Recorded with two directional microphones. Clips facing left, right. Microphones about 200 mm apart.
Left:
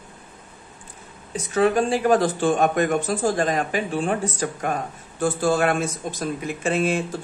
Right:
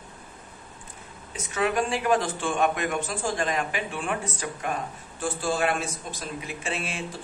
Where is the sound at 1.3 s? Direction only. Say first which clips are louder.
Left 6 dB; 35° left (ahead or behind).